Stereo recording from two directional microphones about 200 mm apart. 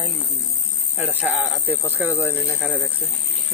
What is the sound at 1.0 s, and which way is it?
Speech, 10° right (ahead or behind).